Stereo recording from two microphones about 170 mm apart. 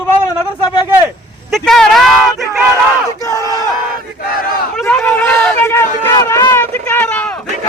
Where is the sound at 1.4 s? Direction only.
Centre (ahead or behind).